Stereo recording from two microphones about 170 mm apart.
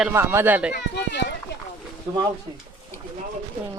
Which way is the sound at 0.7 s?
85° left.